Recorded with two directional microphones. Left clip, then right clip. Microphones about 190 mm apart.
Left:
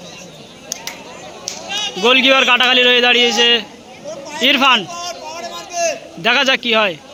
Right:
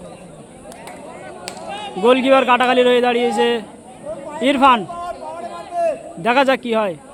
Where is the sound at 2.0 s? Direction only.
15° right (ahead or behind).